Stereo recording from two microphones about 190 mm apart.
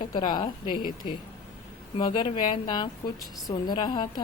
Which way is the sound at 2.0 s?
25° left (ahead or behind).